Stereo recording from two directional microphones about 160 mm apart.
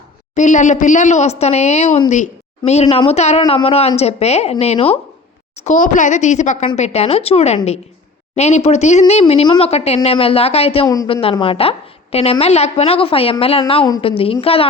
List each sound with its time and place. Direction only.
0.3 s a woman's voice: 50° left (ahead or behind)
5.5 s a woman's voice: 50° left (ahead or behind)
10.8 s a woman's voice: 20° left (ahead or behind)
11.1 s speech: 35° left (ahead or behind)